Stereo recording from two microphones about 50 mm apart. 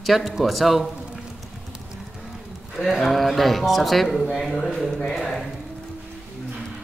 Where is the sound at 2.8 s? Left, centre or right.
Centre.